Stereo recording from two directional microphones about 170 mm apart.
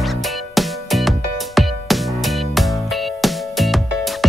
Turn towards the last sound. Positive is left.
turn(degrees=0)  # may be behind; listen again after turning